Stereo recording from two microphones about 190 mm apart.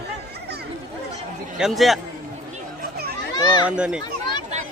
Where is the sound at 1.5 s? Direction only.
Centre (ahead or behind).